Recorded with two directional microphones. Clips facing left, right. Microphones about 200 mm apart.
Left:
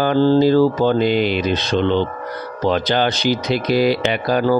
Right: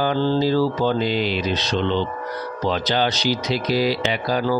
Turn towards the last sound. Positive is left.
turn(degrees=55)  # may be behind; listen again after turning